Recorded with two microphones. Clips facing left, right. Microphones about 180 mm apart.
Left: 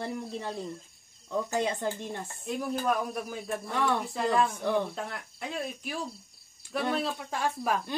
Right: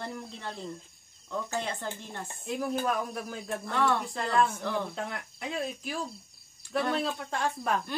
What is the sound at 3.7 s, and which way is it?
Speech, 10° left (ahead or behind).